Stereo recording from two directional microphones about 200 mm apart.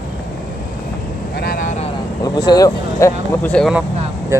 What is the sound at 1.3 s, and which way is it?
Vehicle, 45° left (ahead or behind).